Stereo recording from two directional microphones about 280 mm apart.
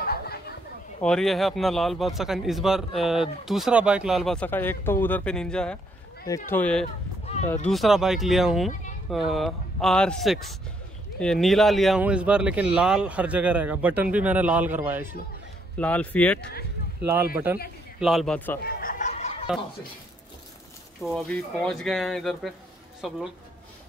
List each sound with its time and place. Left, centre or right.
0.0 s chatter: left
1.0 s speech: centre
15.8 s speech: centre
17.0 s speech: centre
18.6 s fowl: left
21.0 s speech: centre